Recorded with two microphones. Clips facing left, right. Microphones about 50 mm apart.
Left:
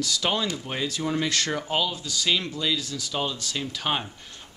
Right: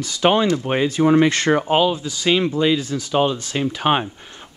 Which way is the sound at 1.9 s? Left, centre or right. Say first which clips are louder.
Right 7 dB; right.